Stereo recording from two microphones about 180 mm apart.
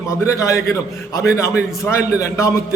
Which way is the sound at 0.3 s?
15° left (ahead or behind).